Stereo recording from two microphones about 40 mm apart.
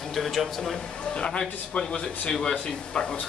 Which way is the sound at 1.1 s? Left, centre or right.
Left.